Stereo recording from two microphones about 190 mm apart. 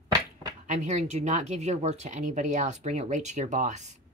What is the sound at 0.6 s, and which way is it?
Speech, 40° right (ahead or behind).